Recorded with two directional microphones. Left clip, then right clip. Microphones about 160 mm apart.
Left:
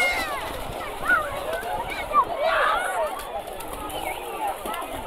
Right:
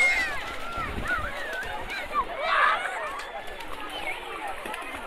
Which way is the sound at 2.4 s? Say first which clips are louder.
Left 1 dB; 55° left (ahead or behind).